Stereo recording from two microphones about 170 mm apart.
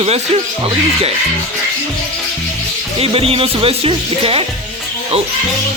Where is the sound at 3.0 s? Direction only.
35° right (ahead or behind).